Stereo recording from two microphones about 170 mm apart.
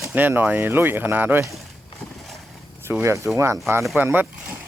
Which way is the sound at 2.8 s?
15° right (ahead or behind).